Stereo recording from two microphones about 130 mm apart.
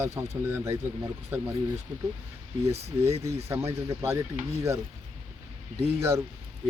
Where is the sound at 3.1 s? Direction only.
55° right (ahead or behind).